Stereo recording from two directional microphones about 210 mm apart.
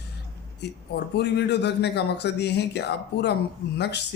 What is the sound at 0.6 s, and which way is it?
Speech, 55° left (ahead or behind).